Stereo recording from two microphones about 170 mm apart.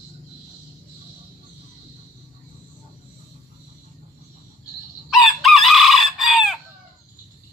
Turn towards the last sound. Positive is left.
turn(degrees=0)  # may be behind; listen again after turning